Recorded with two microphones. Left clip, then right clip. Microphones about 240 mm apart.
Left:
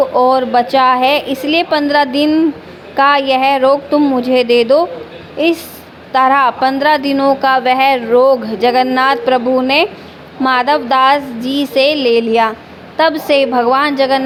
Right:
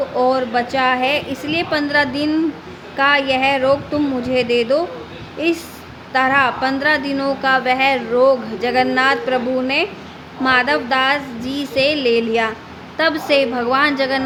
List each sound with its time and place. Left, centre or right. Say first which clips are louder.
0.2 s a woman's voice: left 4 dB; centre